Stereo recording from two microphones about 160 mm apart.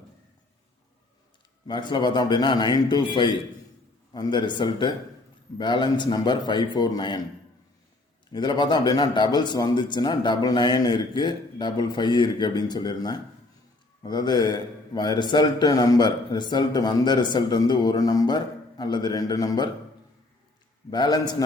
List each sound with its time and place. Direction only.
1.6 s a man's voice: 30° left (ahead or behind)
8.3 s a man's voice: 25° left (ahead or behind)
20.9 s a man's voice: 25° left (ahead or behind)